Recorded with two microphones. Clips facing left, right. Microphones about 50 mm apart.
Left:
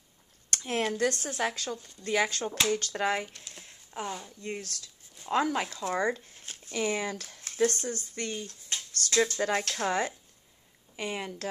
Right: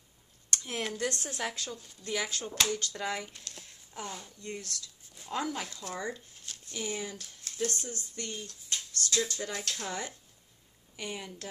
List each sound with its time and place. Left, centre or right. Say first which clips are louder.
0.5 s a sound: left 5 dB; left
0.9 s a woman's voice: left 5 dB; left
1.5 s speech: left 4 dB; left
3.4 s a sound: even; centre
4.4 s speech: left 4 dB; left
5.3 s speech: left 7 dB; left
5.8 s speech: left 9 dB; left
6.4 s a sound: left 2 dB; left
6.7 s speech: left 7 dB; left
7.4 s speech: left 7 dB; left
8.5 s a sound: left 1 dB; left
9.4 s speech: left 9 dB; left
9.7 s speech: left 8 dB; left